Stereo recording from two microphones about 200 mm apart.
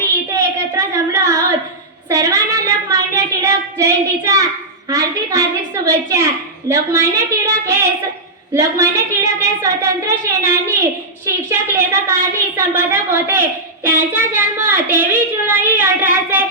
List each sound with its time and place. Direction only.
0.0 s child singing: 15° right (ahead or behind)
4.9 s a woman's voice: 15° right (ahead or behind)